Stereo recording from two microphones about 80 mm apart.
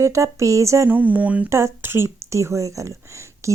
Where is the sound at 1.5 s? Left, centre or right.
Right.